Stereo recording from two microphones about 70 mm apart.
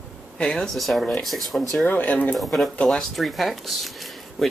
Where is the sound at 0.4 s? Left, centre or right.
Centre.